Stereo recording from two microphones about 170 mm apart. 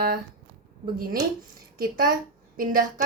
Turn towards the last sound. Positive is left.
turn(degrees=-55)  # may be behind; listen again after turning